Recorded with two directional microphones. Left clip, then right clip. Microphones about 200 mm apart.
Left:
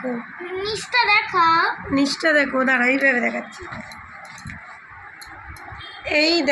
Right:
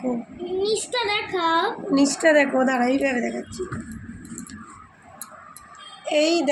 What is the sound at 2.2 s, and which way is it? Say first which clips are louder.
Speech: right 1 dB; 25° left (ahead or behind).